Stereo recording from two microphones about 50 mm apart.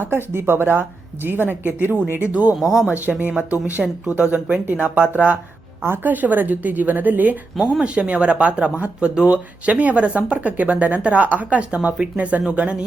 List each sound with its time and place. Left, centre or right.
0.1 s speech: right
2.1 s speech: right
2.6 s speech: centre
2.8 s speech: right
3.8 s speech: centre
4.2 s speech: right
4.6 s a woman's voice: right
5.8 s a woman's voice: right
7.6 s speech: centre